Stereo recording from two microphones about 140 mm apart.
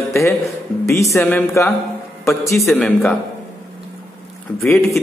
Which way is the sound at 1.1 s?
15° left (ahead or behind).